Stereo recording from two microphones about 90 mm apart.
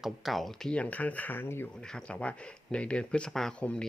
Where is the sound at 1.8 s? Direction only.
5° left (ahead or behind).